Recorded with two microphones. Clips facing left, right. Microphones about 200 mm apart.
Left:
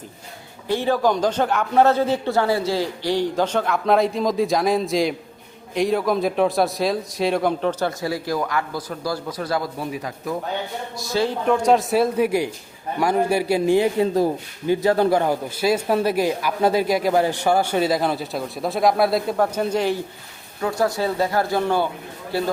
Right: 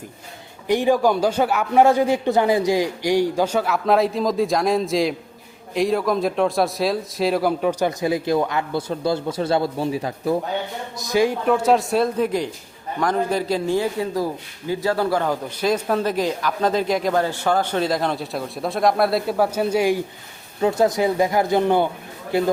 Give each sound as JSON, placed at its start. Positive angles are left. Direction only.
{"t": 0.7, "sound": "a man's voice", "side_deg": -15}
{"t": 10.9, "sound": "a man's voice", "side_deg": -15}
{"t": 11.4, "sound": "a man's voice", "side_deg": -5}
{"t": 20.6, "sound": "speech", "side_deg": -25}